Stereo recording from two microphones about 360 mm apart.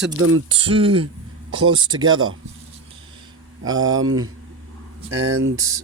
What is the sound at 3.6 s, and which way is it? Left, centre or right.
Speech, centre.